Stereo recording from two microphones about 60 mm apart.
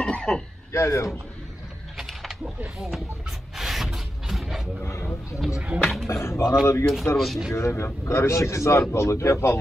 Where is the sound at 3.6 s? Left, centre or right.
Centre.